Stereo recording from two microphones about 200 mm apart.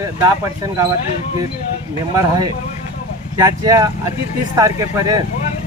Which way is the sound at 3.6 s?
20° right (ahead or behind).